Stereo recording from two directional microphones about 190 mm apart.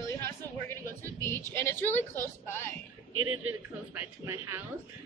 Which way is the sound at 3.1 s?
90° right.